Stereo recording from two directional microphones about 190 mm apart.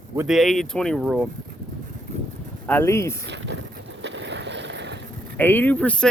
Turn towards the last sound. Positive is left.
turn(degrees=5)  # may be behind; listen again after turning